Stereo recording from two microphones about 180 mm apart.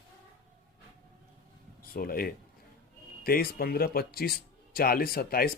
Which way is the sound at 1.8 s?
55° left (ahead or behind).